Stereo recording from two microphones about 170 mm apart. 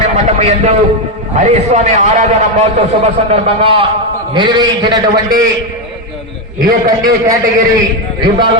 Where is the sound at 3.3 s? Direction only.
30° right (ahead or behind).